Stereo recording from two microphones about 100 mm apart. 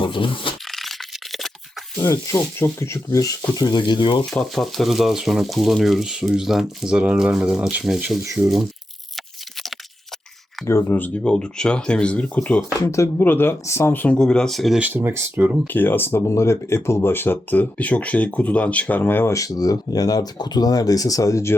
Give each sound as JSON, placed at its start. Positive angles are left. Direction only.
{"t": 0.0, "sound": "speech", "side_deg": 55}
{"t": 0.7, "sound": "a sound", "side_deg": 0}
{"t": 2.0, "sound": "speech", "side_deg": 30}
{"t": 3.5, "sound": "speech", "side_deg": 45}
{"t": 4.3, "sound": "speech", "side_deg": 5}
{"t": 10.7, "sound": "speech", "side_deg": 25}
{"t": 11.2, "sound": "speech", "side_deg": 10}
{"t": 12.8, "sound": "speech", "side_deg": 30}
{"t": 14.2, "sound": "speech", "side_deg": 5}
{"t": 14.8, "sound": "speech", "side_deg": -20}
{"t": 15.6, "sound": "speech", "side_deg": 20}